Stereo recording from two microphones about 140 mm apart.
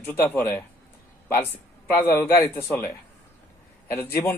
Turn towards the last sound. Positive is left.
turn(degrees=15)  # may be behind; listen again after turning